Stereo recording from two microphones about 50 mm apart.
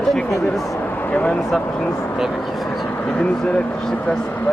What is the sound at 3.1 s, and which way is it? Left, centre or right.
Speech, left.